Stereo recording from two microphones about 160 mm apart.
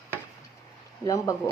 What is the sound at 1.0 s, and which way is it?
Speech, 20° left (ahead or behind).